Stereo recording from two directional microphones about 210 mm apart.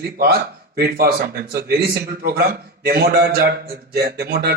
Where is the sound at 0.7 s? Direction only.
45° right (ahead or behind).